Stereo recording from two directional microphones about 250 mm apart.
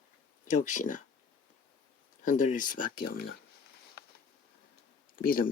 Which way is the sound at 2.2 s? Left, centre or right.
Left.